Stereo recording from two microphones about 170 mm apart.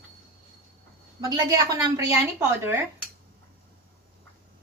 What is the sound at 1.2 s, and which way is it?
A woman's voice, 20° right (ahead or behind).